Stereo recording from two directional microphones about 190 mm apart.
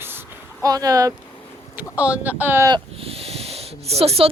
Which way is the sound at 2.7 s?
30° right (ahead or behind).